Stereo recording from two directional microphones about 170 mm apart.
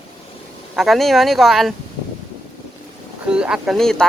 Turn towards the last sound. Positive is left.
turn(degrees=0)  # may be behind; listen again after turning